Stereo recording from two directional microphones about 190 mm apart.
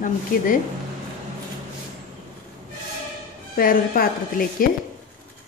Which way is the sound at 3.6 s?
50° left (ahead or behind).